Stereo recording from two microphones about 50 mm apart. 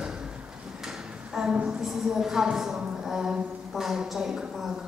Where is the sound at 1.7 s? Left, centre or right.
Centre.